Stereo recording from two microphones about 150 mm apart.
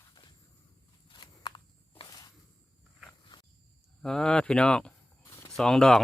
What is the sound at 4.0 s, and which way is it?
Speech, 5° left (ahead or behind).